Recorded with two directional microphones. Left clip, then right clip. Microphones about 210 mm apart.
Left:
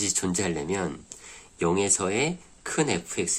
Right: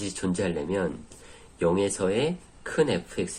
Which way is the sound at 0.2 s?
55° left (ahead or behind).